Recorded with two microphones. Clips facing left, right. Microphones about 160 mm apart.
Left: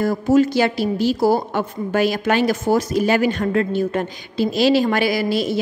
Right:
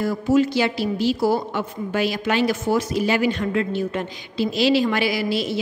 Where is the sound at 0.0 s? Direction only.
45° left (ahead or behind).